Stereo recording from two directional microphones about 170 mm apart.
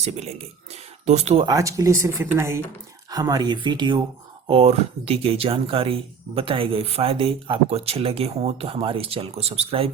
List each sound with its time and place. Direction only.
0.0 s speech: 40° right (ahead or behind)
1.5 s speech: 20° right (ahead or behind); by 9.9 s 35° right (ahead or behind)